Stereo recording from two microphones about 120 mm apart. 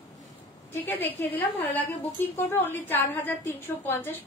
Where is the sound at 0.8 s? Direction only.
15° left (ahead or behind).